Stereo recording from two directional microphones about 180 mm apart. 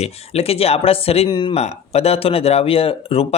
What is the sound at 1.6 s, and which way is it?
A man's voice, 35° left (ahead or behind).